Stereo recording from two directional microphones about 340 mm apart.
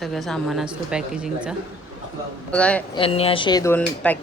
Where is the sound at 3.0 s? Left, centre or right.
Centre.